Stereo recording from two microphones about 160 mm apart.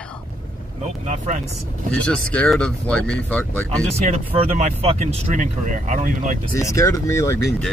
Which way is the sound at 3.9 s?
40° right (ahead or behind).